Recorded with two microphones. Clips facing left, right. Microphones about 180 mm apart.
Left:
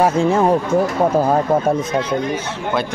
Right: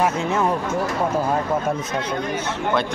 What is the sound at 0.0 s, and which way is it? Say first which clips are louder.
Speech: left 6 dB; 30° left (ahead or behind).